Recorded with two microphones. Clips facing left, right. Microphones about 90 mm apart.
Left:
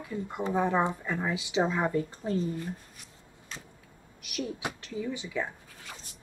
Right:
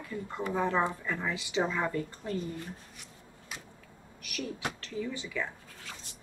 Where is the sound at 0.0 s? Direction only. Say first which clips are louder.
Left 3 dB; 20° left (ahead or behind).